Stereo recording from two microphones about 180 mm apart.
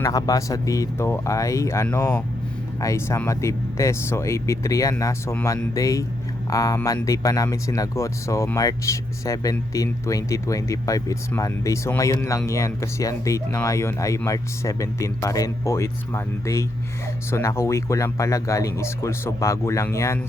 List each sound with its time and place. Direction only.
0.0 s speech: 20° left (ahead or behind)